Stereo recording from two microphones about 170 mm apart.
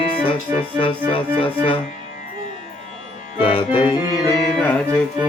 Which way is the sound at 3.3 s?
30° left (ahead or behind).